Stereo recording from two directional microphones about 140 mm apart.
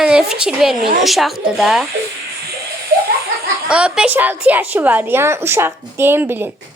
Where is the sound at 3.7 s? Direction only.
5° right (ahead or behind).